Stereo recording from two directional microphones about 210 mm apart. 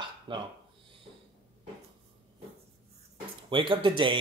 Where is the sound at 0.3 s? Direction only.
25° right (ahead or behind).